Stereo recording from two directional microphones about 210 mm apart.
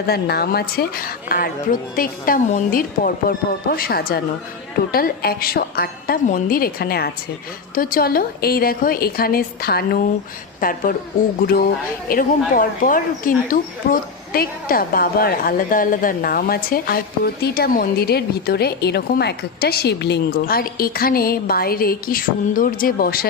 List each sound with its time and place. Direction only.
0.1 s speech: 50° left (ahead or behind)